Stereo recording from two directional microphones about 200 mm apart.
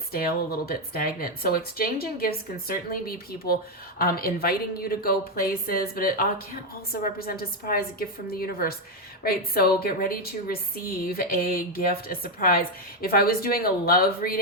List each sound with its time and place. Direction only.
0.1 s speech: 50° left (ahead or behind)